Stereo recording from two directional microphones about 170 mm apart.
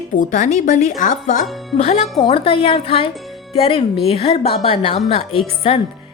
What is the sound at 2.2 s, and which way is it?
A woman's voice, 30° left (ahead or behind).